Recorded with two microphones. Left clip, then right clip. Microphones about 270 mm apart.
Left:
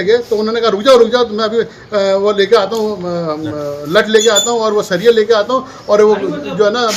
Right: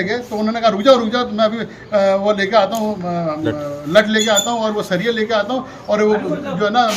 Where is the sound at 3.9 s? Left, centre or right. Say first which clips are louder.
Left 3 dB; centre.